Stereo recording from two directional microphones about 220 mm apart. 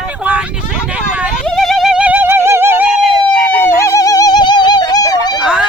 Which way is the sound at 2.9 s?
40° left (ahead or behind).